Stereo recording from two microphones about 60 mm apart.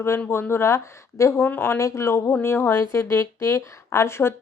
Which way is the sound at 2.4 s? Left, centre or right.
Left.